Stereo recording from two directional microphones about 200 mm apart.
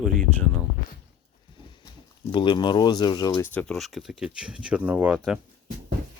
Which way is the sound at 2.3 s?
25° left (ahead or behind).